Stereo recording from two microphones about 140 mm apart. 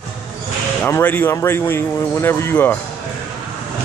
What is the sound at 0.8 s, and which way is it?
Speech, 15° left (ahead or behind).